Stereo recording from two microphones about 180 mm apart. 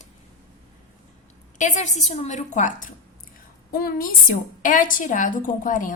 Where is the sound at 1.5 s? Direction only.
45° left (ahead or behind).